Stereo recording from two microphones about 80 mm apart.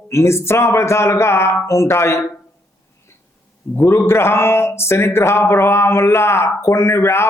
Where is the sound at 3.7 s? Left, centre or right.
Left.